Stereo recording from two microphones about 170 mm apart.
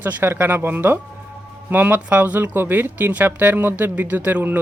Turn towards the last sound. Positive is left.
turn(degrees=-10)  # may be behind; listen again after turning